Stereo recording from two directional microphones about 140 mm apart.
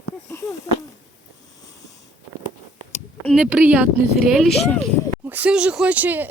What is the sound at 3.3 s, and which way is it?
Speech, 10° right (ahead or behind).